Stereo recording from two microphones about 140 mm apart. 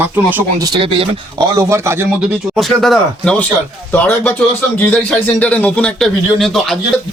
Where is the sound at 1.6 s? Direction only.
20° right (ahead or behind).